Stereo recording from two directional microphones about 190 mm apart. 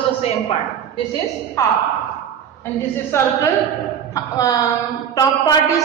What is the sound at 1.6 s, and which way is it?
A woman's voice, 20° left (ahead or behind).